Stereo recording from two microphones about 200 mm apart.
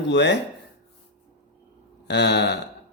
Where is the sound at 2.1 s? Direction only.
60° left (ahead or behind).